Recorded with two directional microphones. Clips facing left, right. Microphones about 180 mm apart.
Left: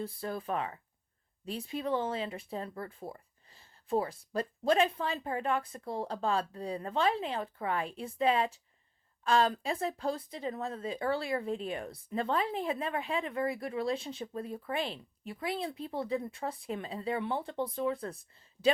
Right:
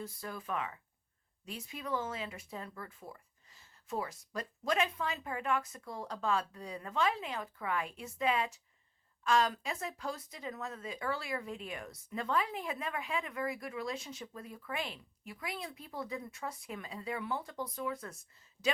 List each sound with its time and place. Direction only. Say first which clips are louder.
0.0 s speech: left 6 dB; 30° left (ahead or behind)